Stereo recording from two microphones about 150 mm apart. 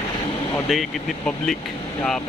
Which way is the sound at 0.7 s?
Centre (ahead or behind).